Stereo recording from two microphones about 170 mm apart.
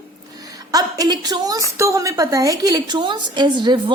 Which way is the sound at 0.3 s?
20° right (ahead or behind).